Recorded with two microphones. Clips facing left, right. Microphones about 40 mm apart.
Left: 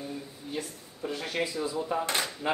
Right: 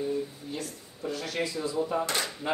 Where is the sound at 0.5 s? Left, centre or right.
Centre.